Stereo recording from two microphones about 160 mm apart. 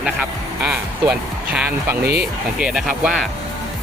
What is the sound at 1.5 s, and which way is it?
Speech, 5° right (ahead or behind).